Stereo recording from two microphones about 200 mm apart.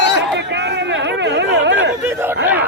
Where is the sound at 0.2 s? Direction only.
60° right (ahead or behind).